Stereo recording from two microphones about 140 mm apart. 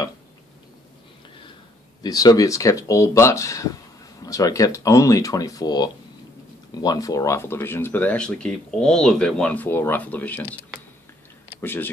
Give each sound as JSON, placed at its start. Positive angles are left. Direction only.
{"t": 2.0, "sound": "speech", "side_deg": 25}
{"t": 11.6, "sound": "speech", "side_deg": 15}